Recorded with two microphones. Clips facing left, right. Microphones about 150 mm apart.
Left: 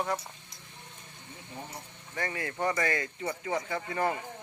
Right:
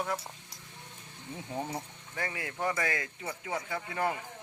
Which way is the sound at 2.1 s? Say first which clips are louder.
Left 3 dB; 5° right (ahead or behind).